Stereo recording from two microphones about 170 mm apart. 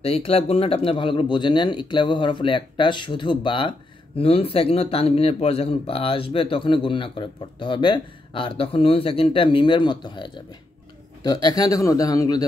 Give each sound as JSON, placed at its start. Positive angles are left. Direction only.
{"t": 0.0, "sound": "a man's voice", "side_deg": 35}